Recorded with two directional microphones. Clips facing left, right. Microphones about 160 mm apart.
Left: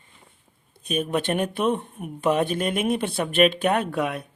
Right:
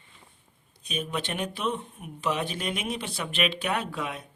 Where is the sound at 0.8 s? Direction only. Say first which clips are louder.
Left 7 dB; 55° left (ahead or behind).